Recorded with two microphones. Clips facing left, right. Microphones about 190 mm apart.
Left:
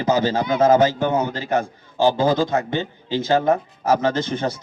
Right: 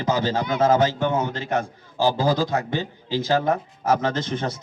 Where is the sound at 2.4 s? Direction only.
25° left (ahead or behind).